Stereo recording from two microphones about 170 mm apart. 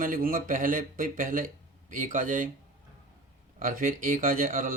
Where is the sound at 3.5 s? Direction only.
55° right (ahead or behind).